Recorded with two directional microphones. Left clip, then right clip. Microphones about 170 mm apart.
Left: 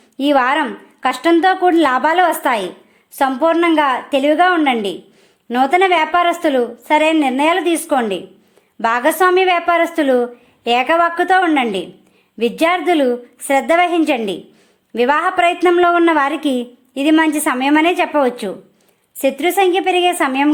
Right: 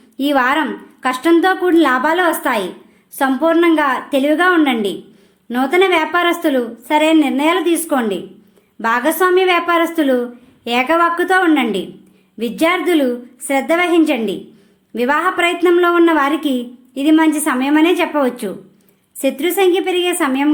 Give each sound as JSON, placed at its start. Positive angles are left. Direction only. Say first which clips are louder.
{"t": 0.2, "sound": "a woman's voice", "louder": "left 1 dB", "side_deg": 35}